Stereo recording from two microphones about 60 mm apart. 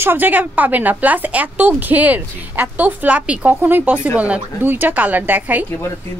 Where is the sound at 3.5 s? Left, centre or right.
Right.